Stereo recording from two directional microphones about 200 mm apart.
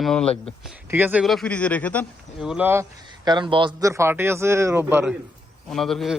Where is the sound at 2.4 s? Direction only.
5° right (ahead or behind).